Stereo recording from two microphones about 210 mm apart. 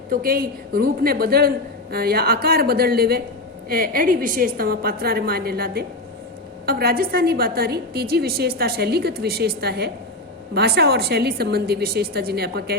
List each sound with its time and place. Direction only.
0.1 s a woman's voice: 45° right (ahead or behind)